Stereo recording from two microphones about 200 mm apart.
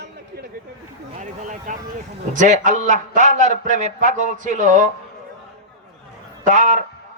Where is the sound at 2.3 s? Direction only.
40° right (ahead or behind).